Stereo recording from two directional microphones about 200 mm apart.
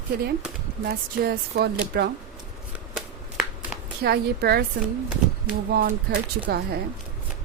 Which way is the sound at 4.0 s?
50° right (ahead or behind).